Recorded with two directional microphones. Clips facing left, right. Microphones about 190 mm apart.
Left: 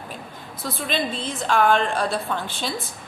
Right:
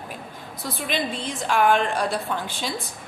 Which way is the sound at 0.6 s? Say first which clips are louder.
Left 1 dB; 15° right (ahead or behind).